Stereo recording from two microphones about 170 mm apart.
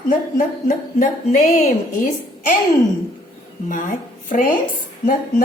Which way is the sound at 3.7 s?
50° left (ahead or behind).